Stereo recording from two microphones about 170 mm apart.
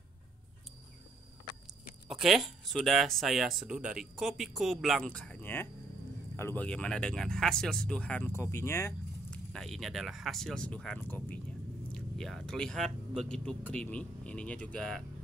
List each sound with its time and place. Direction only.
2.0 s speech: centre (ahead or behind); by 9.4 s 15° left (ahead or behind)
9.5 s speech: centre (ahead or behind)